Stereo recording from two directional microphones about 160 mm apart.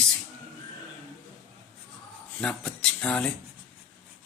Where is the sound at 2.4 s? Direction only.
5° left (ahead or behind).